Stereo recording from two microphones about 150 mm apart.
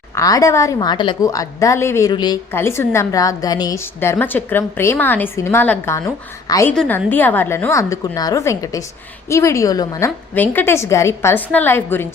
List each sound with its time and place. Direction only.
0.2 s a woman's voice: 20° left (ahead or behind)
2.1 s a woman's voice: 30° left (ahead or behind)
2.5 s a woman's voice: 15° left (ahead or behind)
10.3 s a woman's voice: 10° left (ahead or behind)